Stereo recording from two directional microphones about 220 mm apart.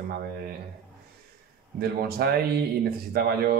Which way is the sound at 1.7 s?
45° right (ahead or behind).